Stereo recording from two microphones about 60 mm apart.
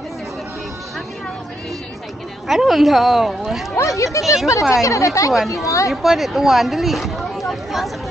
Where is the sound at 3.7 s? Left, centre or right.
Left.